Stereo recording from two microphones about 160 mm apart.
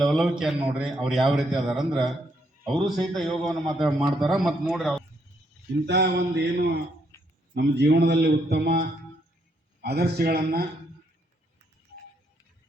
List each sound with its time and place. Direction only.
0.0 s a man's voice: centre (ahead or behind)
3.8 s a man's voice: 25° right (ahead or behind)
4.3 s a man's voice: centre (ahead or behind)
5.8 s a man's voice: 90° right
9.8 s a man's voice: 90° right; by 10.7 s 75° right (ahead or behind)